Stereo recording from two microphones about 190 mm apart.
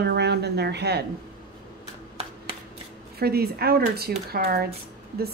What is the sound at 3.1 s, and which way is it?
A woman's voice, 55° right (ahead or behind).